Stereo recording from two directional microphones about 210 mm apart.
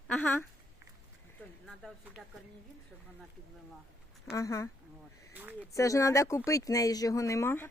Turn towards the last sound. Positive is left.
turn(degrees=10)  # may be behind; listen again after turning